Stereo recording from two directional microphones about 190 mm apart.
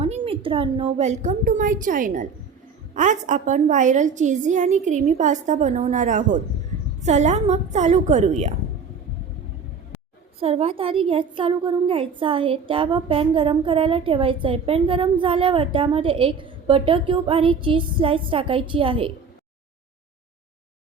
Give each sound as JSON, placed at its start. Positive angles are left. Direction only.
{"t": 0.0, "sound": "a woman's voice", "side_deg": -30}
{"t": 10.4, "sound": "a woman's voice", "side_deg": -30}